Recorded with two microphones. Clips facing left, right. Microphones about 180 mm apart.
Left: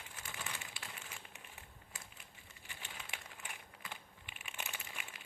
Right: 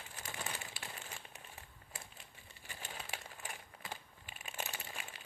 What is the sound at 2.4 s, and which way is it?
Crumpling, 40° right (ahead or behind).